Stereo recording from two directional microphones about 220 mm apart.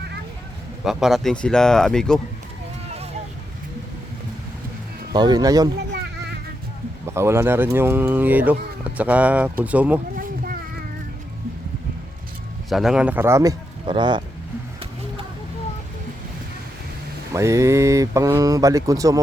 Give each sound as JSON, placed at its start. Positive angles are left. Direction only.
{"t": 0.9, "sound": "speech", "side_deg": 0}
{"t": 5.1, "sound": "speech", "side_deg": -20}
{"t": 5.9, "sound": "a sound", "side_deg": -45}
{"t": 7.1, "sound": "speech", "side_deg": -10}
{"t": 10.2, "sound": "a sound", "side_deg": -40}
{"t": 12.7, "sound": "speech", "side_deg": 0}
{"t": 17.3, "sound": "speech", "side_deg": -15}